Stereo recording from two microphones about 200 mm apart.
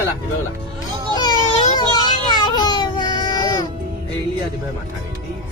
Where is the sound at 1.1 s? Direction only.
20° left (ahead or behind).